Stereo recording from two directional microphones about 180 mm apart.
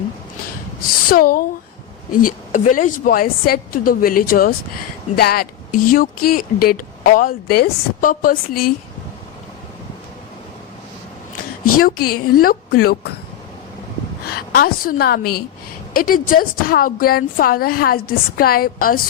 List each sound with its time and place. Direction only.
0.8 s a woman's voice: 55° left (ahead or behind)
11.8 s a woman's voice: 55° left (ahead or behind)
14.3 s a woman's voice: 55° left (ahead or behind)